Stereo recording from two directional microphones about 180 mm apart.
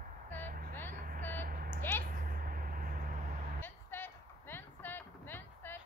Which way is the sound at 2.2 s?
50° right (ahead or behind).